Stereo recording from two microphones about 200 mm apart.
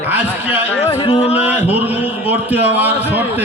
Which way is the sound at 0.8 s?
30° left (ahead or behind).